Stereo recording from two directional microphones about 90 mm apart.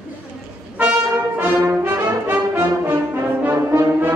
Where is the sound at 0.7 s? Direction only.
15° right (ahead or behind).